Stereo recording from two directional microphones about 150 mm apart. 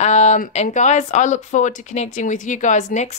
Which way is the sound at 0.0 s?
50° left (ahead or behind).